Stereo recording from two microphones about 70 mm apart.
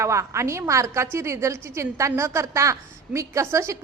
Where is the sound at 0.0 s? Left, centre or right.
Right.